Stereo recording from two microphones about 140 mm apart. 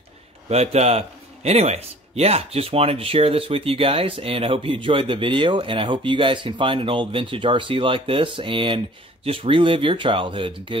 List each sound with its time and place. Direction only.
0.5 s a man's voice: 50° right (ahead or behind)